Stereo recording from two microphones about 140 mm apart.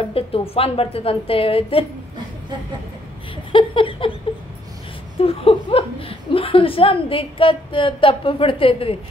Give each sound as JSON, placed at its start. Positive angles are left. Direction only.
{"t": 0.1, "sound": "speech", "side_deg": 40}
{"t": 3.5, "sound": "speech", "side_deg": 40}
{"t": 5.2, "sound": "speech", "side_deg": 40}